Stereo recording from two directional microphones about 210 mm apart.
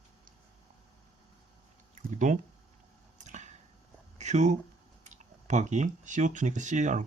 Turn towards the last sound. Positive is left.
turn(degrees=-35)  # may be behind; listen again after turning